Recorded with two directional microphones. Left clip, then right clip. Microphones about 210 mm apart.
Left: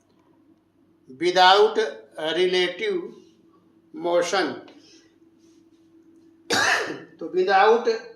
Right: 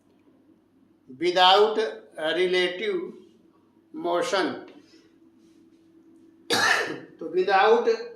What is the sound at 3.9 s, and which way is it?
Speech, 10° left (ahead or behind).